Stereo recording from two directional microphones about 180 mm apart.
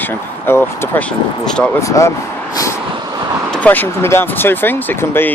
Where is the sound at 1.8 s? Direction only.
15° left (ahead or behind).